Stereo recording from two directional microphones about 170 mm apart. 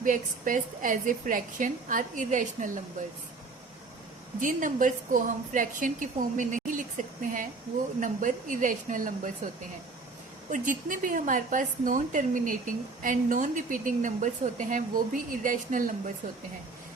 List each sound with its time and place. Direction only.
0.0 s a woman's voice: 50° right (ahead or behind)
4.4 s a woman's voice: 50° right (ahead or behind)
10.5 s a woman's voice: 50° right (ahead or behind)